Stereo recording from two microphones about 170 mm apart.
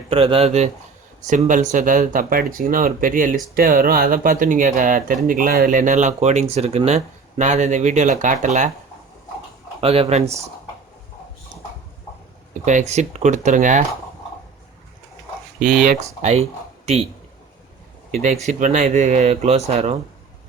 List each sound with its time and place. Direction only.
0.1 s speech: 35° right (ahead or behind)
1.3 s speech: 50° right (ahead or behind)
9.8 s speech: 35° right (ahead or behind)
12.6 s speech: 40° right (ahead or behind)
15.6 s speech: 50° right (ahead or behind)
18.4 s speech: 45° right (ahead or behind)